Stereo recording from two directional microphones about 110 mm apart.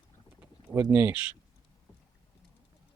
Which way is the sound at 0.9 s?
15° right (ahead or behind).